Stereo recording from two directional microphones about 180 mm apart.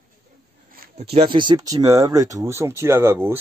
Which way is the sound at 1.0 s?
30° right (ahead or behind).